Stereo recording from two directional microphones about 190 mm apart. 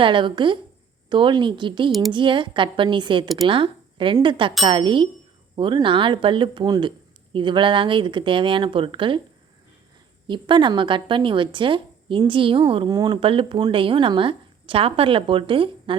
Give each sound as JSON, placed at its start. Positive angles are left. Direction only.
{"t": 0.0, "sound": "speech", "side_deg": -25}
{"t": 1.9, "sound": "speech", "side_deg": 0}
{"t": 2.1, "sound": "speech", "side_deg": -25}
{"t": 10.2, "sound": "speech", "side_deg": -25}